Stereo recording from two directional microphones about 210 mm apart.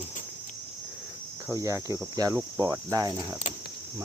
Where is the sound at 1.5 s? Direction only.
15° right (ahead or behind).